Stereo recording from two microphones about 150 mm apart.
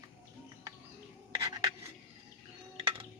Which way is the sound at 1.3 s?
25° right (ahead or behind).